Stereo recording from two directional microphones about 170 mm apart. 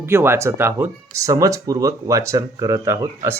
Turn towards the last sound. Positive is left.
turn(degrees=-15)  # may be behind; listen again after turning